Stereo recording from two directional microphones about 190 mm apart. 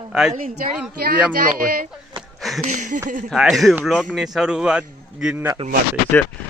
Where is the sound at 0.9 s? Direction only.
50° right (ahead or behind).